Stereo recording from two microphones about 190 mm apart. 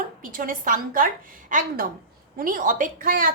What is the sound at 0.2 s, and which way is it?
A woman's voice, 45° right (ahead or behind).